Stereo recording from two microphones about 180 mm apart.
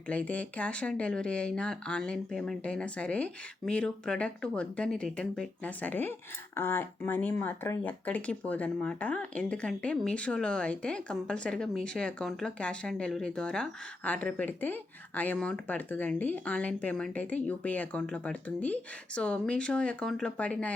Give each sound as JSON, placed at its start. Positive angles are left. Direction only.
{"t": 0.1, "sound": "speech", "side_deg": 10}